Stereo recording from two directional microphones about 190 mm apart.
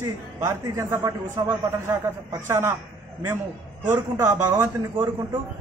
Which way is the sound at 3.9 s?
15° right (ahead or behind).